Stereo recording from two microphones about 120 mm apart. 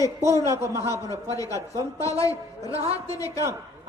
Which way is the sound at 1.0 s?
30° left (ahead or behind).